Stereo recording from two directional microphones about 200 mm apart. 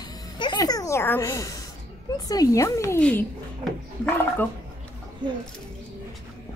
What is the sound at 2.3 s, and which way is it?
Speech, 15° left (ahead or behind).